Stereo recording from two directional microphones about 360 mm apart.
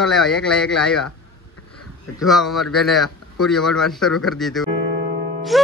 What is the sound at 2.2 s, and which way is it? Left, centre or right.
A man's voice, centre.